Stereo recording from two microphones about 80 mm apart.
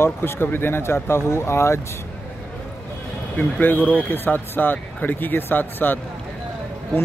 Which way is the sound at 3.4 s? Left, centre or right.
Left.